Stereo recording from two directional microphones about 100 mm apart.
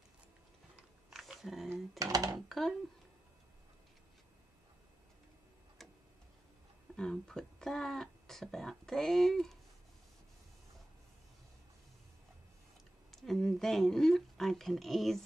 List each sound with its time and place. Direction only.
0.7 s a sound: 5° right (ahead or behind)
2.0 s speech: 35° right (ahead or behind)
2.4 s speech: 5° left (ahead or behind)
7.0 s speech: 5° left (ahead or behind)
13.1 s speech: 5° left (ahead or behind)